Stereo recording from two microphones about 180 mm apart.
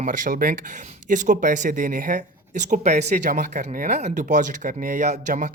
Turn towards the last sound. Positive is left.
turn(degrees=-45)  # may be behind; listen again after turning